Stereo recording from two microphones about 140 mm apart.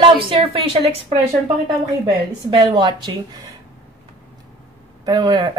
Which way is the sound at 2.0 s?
35° right (ahead or behind).